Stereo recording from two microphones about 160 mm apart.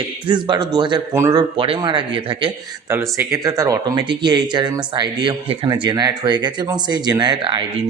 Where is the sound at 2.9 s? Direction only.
15° right (ahead or behind).